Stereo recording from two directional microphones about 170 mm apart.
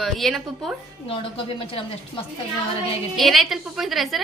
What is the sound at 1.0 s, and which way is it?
Speech, 30° left (ahead or behind).